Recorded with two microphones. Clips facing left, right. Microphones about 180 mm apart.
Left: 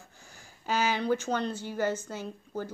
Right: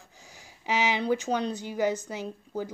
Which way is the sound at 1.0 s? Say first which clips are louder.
Right 2 dB; 10° right (ahead or behind).